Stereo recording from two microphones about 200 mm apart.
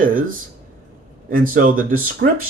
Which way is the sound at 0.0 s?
45° right (ahead or behind).